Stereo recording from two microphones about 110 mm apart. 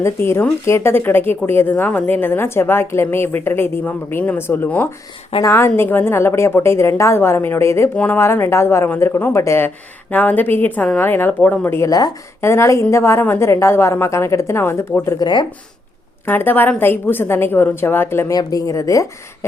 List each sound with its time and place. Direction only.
0.0 s a woman's voice: 20° left (ahead or behind)
11.9 s speech: 35° left (ahead or behind)
12.4 s a woman's voice: 25° left (ahead or behind)
15.2 s speech: 45° left (ahead or behind)
16.2 s a woman's voice: 20° left (ahead or behind)
18.3 s a woman's voice: 30° left (ahead or behind)